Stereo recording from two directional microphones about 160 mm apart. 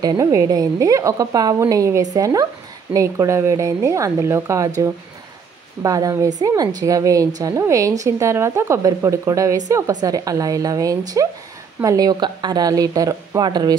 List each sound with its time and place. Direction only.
0.0 s a woman's voice: 20° right (ahead or behind)